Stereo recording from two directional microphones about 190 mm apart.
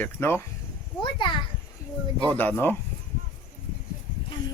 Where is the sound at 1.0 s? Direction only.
25° left (ahead or behind).